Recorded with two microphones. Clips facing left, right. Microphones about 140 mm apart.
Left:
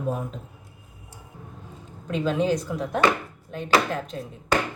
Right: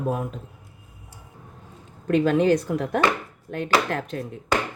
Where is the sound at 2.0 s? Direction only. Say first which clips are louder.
Right 5 dB; 60° right (ahead or behind).